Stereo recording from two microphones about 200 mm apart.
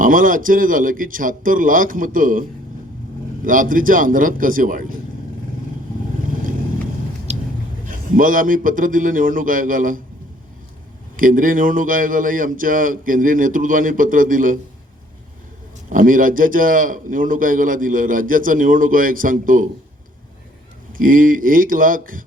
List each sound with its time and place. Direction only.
0.0 s a man's voice: 45° right (ahead or behind)
3.4 s a man's voice: 45° right (ahead or behind)
7.3 s biting: 35° right (ahead or behind)
7.9 s a man's voice: 45° right (ahead or behind)
11.2 s a man's voice: 45° right (ahead or behind)
15.9 s a man's voice: 45° right (ahead or behind)
21.0 s a man's voice: 45° right (ahead or behind)